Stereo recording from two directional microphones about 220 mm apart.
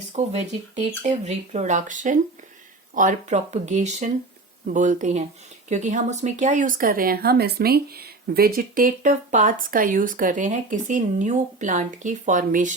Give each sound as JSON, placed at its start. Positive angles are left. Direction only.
{"t": 0.1, "sound": "speech", "side_deg": -30}